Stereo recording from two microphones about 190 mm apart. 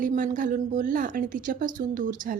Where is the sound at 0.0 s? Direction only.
45° right (ahead or behind).